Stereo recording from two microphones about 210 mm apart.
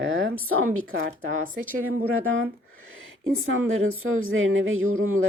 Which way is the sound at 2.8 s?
70° right (ahead or behind).